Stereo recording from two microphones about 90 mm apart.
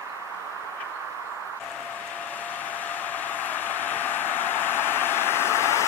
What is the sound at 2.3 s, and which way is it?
Vehicle, 20° left (ahead or behind).